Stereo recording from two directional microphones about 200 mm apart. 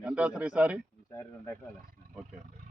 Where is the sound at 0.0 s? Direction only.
5° right (ahead or behind).